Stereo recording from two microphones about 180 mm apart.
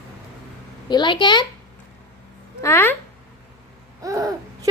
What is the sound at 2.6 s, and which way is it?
Speech, 15° left (ahead or behind).